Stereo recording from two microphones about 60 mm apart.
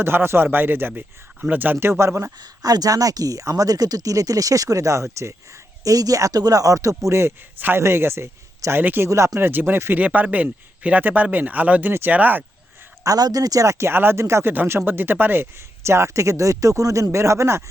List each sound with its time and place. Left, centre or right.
0.0 s speech: right
1.9 s speech: right
2.6 s speech: right
5.8 s speech: right
7.1 s speech: right
8.8 s speech: right
9.0 s speech: right
9.4 s a man's voice: right
13.1 s speech: right
13.9 s speech: right
14.7 s speech: right
15.8 s speech: right